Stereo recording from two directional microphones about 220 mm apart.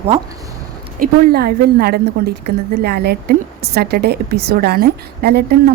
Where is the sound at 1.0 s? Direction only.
45° right (ahead or behind).